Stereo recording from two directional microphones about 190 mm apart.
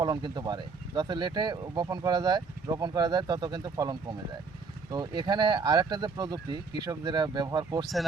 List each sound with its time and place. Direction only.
0.0 s speech: 20° right (ahead or behind)